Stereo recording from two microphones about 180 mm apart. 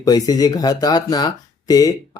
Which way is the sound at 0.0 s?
20° left (ahead or behind).